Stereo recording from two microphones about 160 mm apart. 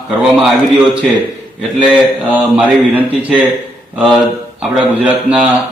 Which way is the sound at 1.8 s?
10° right (ahead or behind).